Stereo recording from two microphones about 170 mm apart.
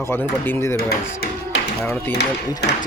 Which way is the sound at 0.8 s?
70° left (ahead or behind).